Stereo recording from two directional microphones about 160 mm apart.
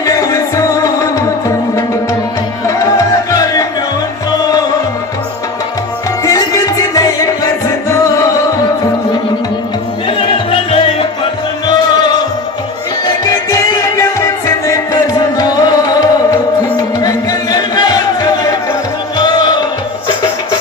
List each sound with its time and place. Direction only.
0.0 s music: 20° left (ahead or behind)
2.6 s music: 20° left (ahead or behind)
6.2 s music: 20° left (ahead or behind)
10.1 s music: 35° left (ahead or behind)
13.2 s music: 20° left (ahead or behind)